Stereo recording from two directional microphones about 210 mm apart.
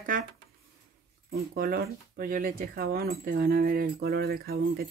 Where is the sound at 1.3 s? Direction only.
45° right (ahead or behind).